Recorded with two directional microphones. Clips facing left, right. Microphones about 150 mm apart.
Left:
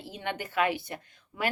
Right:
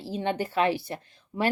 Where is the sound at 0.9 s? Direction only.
30° right (ahead or behind).